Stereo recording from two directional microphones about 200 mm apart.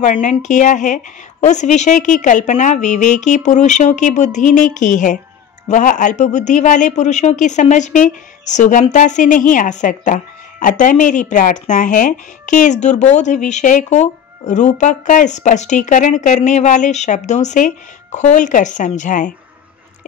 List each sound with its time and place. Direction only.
0.0 s speech: 40° left (ahead or behind)